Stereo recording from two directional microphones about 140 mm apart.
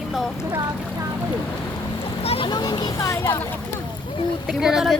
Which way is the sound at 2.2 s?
40° left (ahead or behind).